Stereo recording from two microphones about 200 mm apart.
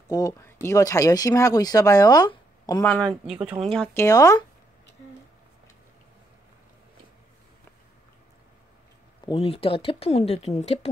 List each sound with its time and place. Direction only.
0.1 s speech: 15° left (ahead or behind)
2.8 s speech: 5° left (ahead or behind)
3.7 s speech: 10° left (ahead or behind)
9.2 s speech: 30° left (ahead or behind)